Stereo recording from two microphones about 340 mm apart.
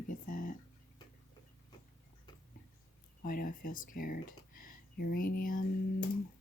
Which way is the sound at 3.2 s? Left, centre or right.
Left.